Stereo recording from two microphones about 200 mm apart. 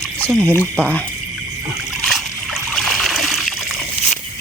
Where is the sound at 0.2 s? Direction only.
5° left (ahead or behind).